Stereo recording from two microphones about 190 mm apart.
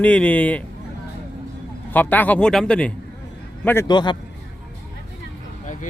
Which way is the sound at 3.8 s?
25° left (ahead or behind).